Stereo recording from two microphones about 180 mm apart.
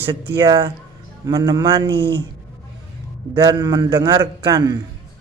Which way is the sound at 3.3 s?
25° right (ahead or behind).